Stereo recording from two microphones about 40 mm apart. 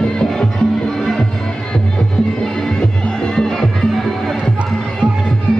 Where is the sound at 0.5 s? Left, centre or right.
Centre.